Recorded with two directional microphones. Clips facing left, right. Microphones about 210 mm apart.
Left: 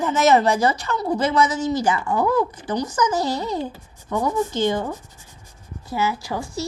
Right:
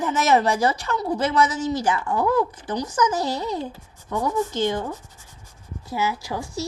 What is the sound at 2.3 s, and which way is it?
Speech, centre (ahead or behind).